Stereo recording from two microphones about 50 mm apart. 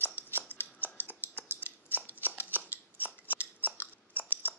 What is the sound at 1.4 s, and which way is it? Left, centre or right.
Scissors, right.